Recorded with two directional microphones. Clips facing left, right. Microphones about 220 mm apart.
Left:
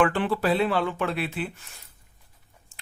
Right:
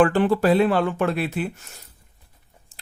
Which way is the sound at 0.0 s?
40° right (ahead or behind).